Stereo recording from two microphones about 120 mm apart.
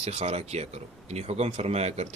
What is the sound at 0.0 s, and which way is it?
Speech, 60° right (ahead or behind).